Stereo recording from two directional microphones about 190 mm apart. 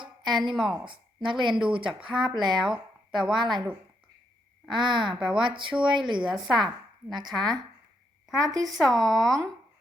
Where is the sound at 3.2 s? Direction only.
25° right (ahead or behind).